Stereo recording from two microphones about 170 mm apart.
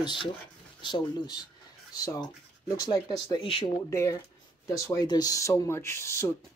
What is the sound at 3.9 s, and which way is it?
Speech, 15° left (ahead or behind).